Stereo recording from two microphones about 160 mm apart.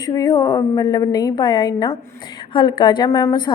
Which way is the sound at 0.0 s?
25° left (ahead or behind).